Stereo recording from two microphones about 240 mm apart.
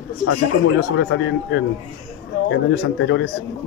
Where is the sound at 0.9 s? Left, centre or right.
Left.